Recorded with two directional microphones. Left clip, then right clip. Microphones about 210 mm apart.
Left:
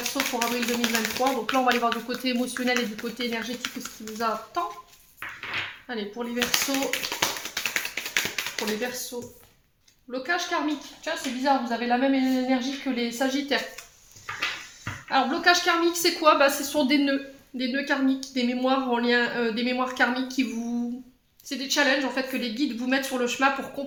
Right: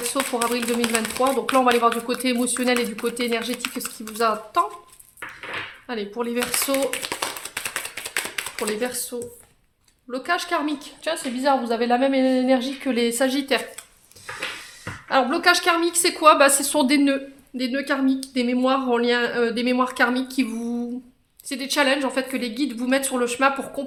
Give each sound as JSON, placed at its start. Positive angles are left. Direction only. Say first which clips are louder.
{"t": 0.1, "sound": "speech", "louder": "right 5 dB", "side_deg": -40}
{"t": 5.9, "sound": "speech", "louder": "right 8 dB", "side_deg": -40}
{"t": 7.2, "sound": "tap", "louder": "left 1 dB", "side_deg": -25}
{"t": 8.5, "sound": "speech", "louder": "right 3 dB", "side_deg": -40}
{"t": 10.1, "sound": "speech", "louder": "right 3 dB", "side_deg": -40}
{"t": 11.0, "sound": "a woman's voice", "louder": "right 4 dB", "side_deg": -55}
{"t": 15.1, "sound": "speech", "louder": "right 3 dB", "side_deg": -50}